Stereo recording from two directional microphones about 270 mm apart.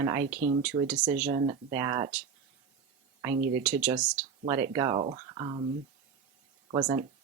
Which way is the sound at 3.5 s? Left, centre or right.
Centre.